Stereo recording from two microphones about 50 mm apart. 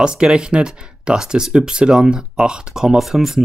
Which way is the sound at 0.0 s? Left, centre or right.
Centre.